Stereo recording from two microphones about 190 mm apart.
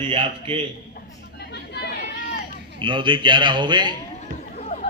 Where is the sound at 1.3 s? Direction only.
60° left (ahead or behind).